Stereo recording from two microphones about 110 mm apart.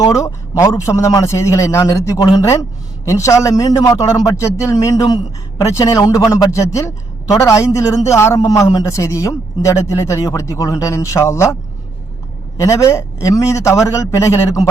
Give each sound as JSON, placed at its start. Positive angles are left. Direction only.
{"t": 0.0, "sound": "a man's voice", "side_deg": 30}
{"t": 12.5, "sound": "a man's voice", "side_deg": 30}